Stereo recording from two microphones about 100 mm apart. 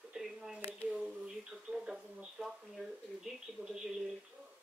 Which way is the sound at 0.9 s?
5° right (ahead or behind).